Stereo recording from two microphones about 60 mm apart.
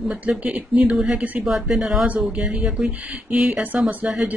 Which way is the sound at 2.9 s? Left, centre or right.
Right.